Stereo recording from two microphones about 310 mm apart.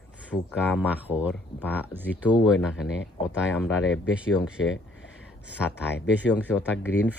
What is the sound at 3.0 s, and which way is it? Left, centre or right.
Speech, left.